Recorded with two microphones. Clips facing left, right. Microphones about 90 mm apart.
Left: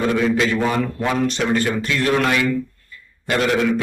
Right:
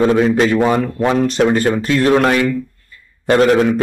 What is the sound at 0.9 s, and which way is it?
Speech, 30° right (ahead or behind).